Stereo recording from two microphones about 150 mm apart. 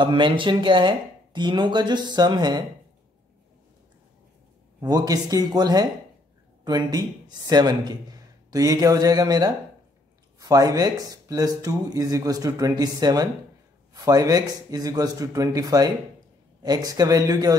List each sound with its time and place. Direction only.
0.0 s speech: 35° right (ahead or behind)
4.7 s speech: 25° right (ahead or behind)